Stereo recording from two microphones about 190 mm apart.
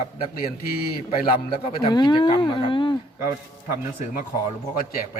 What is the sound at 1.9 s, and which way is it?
Speech, 25° left (ahead or behind).